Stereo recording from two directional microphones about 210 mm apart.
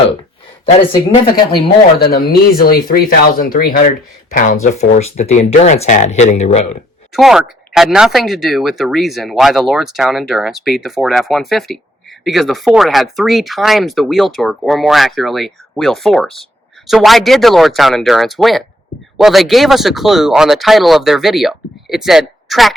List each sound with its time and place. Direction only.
0.9 s speech: 20° left (ahead or behind)
2.0 s speech: 45° left (ahead or behind)
4.6 s speech: 35° left (ahead or behind)
7.1 s speech: centre (ahead or behind)